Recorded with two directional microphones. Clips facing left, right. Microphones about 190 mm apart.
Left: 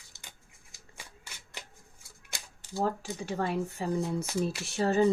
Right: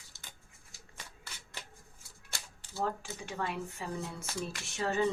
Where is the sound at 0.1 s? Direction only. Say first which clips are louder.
Left 2 dB; 20° left (ahead or behind).